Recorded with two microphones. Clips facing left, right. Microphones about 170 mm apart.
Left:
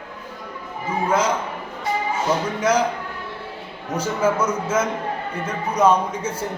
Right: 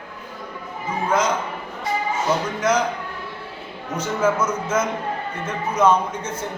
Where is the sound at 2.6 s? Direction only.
10° left (ahead or behind).